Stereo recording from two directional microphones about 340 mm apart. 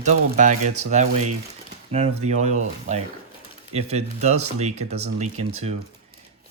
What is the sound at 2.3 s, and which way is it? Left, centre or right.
Speech, centre.